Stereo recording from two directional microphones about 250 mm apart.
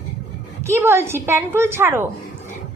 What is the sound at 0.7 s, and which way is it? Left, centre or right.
A woman's voice, centre.